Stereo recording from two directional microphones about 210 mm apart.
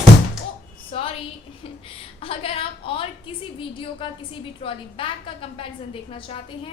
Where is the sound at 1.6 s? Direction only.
25° left (ahead or behind).